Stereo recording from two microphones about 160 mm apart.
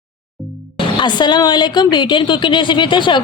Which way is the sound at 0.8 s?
30° left (ahead or behind).